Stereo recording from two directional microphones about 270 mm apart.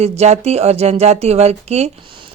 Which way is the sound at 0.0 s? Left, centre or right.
Right.